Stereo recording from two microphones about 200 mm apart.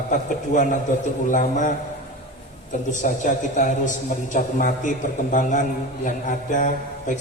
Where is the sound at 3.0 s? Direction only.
40° left (ahead or behind).